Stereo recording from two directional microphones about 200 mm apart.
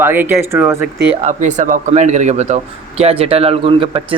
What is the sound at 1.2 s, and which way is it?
Speech, 35° right (ahead or behind).